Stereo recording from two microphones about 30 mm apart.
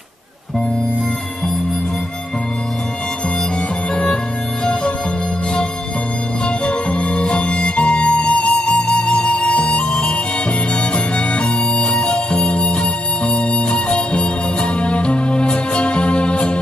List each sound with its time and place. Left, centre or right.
3.9 s music: left
6.4 s music: left
11.1 s music: left